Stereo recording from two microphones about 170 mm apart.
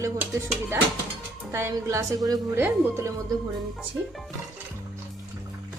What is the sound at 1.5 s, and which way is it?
A woman's voice, 20° right (ahead or behind).